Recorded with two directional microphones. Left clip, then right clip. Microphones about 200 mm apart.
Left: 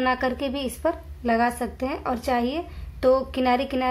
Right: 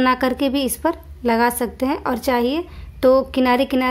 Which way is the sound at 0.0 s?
40° right (ahead or behind).